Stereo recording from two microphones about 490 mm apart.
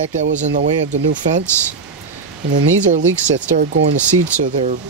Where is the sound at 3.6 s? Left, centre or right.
Right.